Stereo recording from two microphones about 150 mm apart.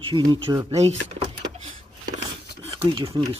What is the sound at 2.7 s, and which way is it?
Speech, 35° right (ahead or behind).